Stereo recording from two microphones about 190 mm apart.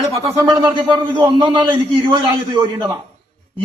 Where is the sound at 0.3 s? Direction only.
20° right (ahead or behind).